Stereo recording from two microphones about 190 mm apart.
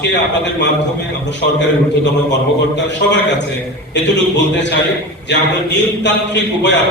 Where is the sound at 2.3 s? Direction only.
70° left (ahead or behind).